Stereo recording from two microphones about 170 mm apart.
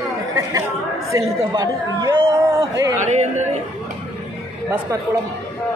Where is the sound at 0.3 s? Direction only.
20° right (ahead or behind).